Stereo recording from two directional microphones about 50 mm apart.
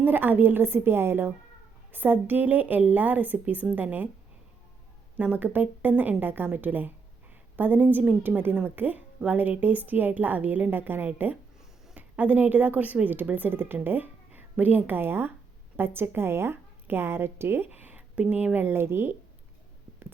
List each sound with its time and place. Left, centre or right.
0.0 s a woman's voice: right
5.1 s a woman's voice: right
13.3 s a woman's voice: right
13.8 s a sound: right
14.5 s a woman's voice: right
17.7 s speech: right
18.7 s a woman's voice: right